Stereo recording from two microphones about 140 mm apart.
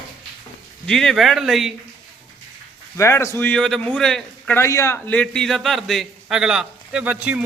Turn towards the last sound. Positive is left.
turn(degrees=-10)  # may be behind; listen again after turning